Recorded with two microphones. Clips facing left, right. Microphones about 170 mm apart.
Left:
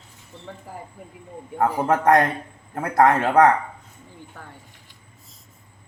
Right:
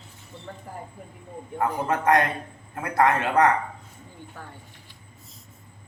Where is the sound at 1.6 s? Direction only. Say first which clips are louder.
Left 5 dB; 45° left (ahead or behind).